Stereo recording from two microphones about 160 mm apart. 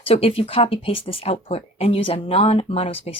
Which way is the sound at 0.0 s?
35° left (ahead or behind).